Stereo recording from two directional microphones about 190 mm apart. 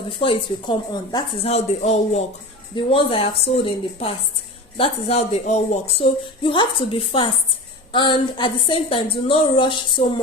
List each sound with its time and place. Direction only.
0.2 s a woman's voice: 25° left (ahead or behind)